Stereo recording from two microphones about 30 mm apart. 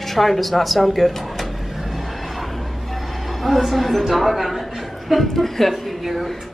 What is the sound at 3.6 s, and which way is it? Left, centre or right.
A woman's voice, centre.